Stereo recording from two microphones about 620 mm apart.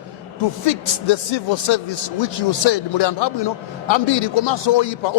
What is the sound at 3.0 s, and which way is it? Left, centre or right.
A man's voice, left.